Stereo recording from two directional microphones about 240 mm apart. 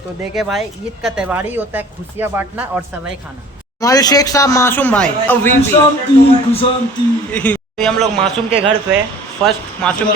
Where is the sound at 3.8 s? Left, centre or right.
Centre.